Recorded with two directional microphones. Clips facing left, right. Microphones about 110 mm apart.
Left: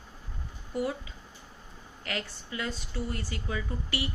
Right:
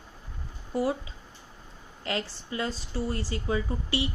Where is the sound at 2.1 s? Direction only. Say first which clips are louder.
Right 4 dB; 30° right (ahead or behind).